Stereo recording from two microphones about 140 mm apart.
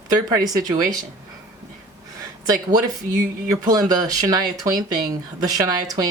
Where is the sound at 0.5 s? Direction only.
30° right (ahead or behind).